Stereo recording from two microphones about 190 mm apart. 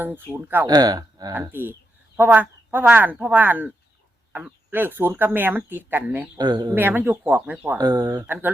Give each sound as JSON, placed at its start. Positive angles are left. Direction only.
{"t": 0.0, "sound": "speech", "side_deg": -10}
{"t": 0.7, "sound": "speech", "side_deg": -20}
{"t": 6.4, "sound": "speech", "side_deg": -20}
{"t": 7.8, "sound": "speech", "side_deg": -20}